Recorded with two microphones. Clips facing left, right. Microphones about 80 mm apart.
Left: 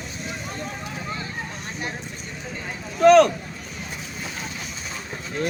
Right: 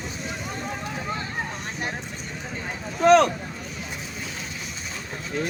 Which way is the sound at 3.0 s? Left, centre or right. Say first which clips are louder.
Left 3 dB; right.